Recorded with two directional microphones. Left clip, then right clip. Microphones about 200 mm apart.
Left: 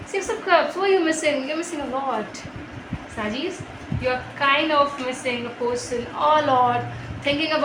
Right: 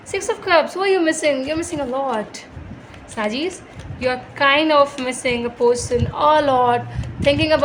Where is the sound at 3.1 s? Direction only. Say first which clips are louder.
Right 5 dB; 60° right (ahead or behind).